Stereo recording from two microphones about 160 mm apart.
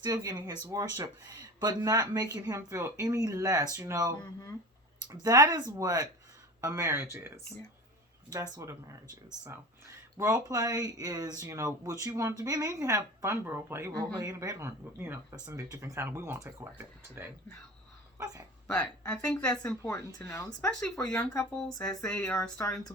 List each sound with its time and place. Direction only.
0.0 s speech: 20° right (ahead or behind)
5.2 s speech: 20° right (ahead or behind)
8.5 s speech: 20° right (ahead or behind)
10.2 s speech: 20° right (ahead or behind)
18.7 s speech: 5° left (ahead or behind)
19.8 s speech: 20° left (ahead or behind)
20.7 s speech: 5° left (ahead or behind); by 23.0 s 20° left (ahead or behind)